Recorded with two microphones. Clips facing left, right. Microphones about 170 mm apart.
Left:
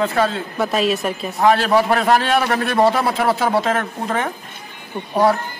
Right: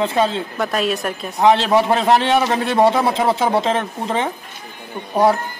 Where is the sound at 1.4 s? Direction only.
20° right (ahead or behind).